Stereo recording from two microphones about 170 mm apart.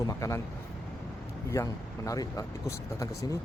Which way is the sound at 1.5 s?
20° left (ahead or behind).